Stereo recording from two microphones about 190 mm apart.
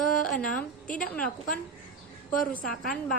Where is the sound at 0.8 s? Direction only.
45° left (ahead or behind).